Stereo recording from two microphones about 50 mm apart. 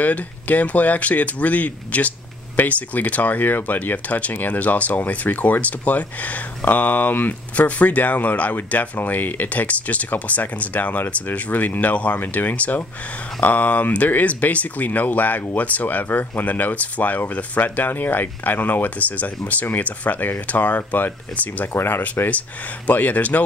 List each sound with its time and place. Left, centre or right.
0.0 s speech: left
21.3 s speech: centre
21.7 s speech: left
22.0 s speech: left